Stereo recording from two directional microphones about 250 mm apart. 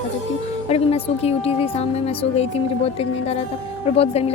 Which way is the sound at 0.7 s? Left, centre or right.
Left.